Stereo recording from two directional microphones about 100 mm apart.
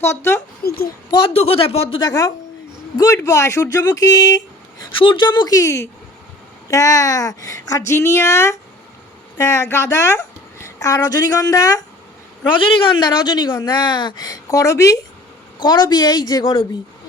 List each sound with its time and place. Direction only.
0.0 s speech: 25° left (ahead or behind)
1.1 s a man's voice: 65° left (ahead or behind)
2.0 s a woman's voice: 40° left (ahead or behind)
4.9 s a woman's voice: 55° left (ahead or behind)
5.5 s a woman's voice: 30° left (ahead or behind)
12.5 s a man's voice: 60° left (ahead or behind)
13.0 s a woman's voice: 40° left (ahead or behind)
15.5 s a woman's voice: 45° left (ahead or behind)
16.4 s a man's voice: 55° left (ahead or behind)